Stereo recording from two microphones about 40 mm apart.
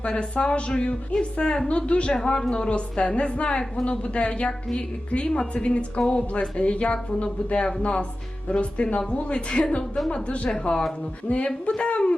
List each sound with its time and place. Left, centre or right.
0.0 s a woman's voice: left
2.1 s a woman's voice: centre